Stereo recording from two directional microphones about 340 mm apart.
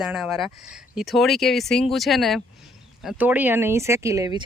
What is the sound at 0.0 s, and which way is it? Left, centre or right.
Speech, centre.